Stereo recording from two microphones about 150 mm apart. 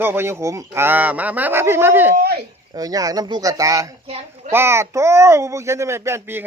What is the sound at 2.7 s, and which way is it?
Speech, 25° right (ahead or behind).